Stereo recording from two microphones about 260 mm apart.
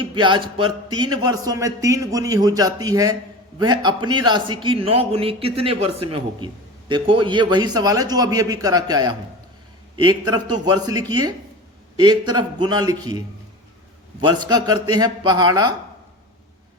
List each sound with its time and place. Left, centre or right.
0.0 s a man's voice: centre
14.3 s a man's voice: centre